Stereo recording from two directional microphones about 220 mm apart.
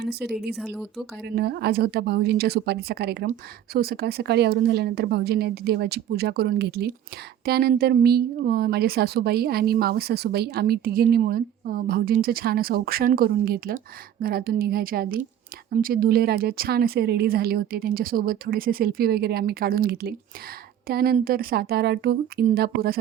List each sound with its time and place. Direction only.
0.0 s a woman's voice: 45° right (ahead or behind)